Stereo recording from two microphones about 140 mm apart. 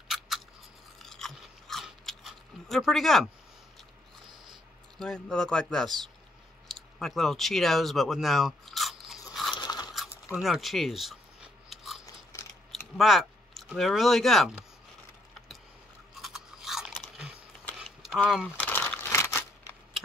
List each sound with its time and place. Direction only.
1.0 s crunch: centre (ahead or behind)
4.9 s speech: 5° left (ahead or behind)
9.3 s crunch: centre (ahead or behind)
9.6 s crunch: 30° left (ahead or behind)
10.0 s a sound: 15° left (ahead or behind)
10.3 s biting: 5° right (ahead or behind)
12.1 s biting: 20° left (ahead or behind)
12.9 s speech: centre (ahead or behind)
16.2 s chewing: centre (ahead or behind)
17.8 s a sound: centre (ahead or behind)
18.6 s crumpling: 10° left (ahead or behind)